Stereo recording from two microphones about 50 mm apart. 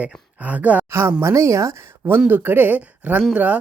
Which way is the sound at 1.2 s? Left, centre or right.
Right.